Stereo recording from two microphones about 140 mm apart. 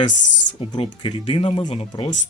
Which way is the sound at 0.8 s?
40° left (ahead or behind).